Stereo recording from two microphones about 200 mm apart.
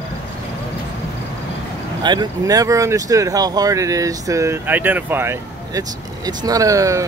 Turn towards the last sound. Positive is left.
turn(degrees=-15)  # may be behind; listen again after turning